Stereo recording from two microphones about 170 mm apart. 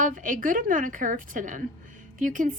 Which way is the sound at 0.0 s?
50° right (ahead or behind).